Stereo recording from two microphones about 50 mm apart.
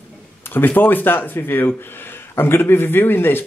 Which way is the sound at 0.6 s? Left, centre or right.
Left.